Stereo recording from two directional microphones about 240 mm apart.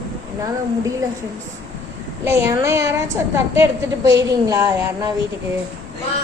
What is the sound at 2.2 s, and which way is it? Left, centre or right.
A woman's voice, centre.